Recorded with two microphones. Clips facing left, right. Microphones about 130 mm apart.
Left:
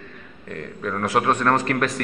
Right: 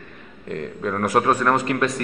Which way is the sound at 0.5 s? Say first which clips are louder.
Right 3 dB; 20° right (ahead or behind).